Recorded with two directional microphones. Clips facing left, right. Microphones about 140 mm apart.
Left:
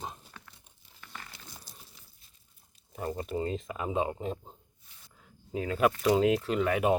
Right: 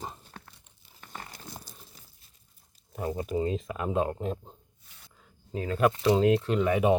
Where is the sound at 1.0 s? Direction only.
40° right (ahead or behind).